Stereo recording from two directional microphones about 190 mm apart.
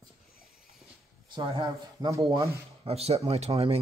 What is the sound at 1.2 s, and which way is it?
Speech, 25° right (ahead or behind).